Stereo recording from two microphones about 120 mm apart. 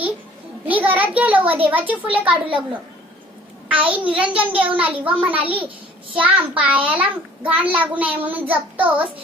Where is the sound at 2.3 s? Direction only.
45° right (ahead or behind).